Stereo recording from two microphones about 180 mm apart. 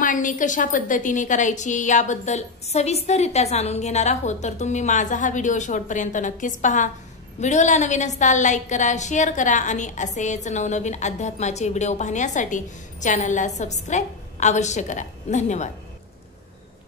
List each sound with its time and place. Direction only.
0.0 s a woman's voice: 45° left (ahead or behind)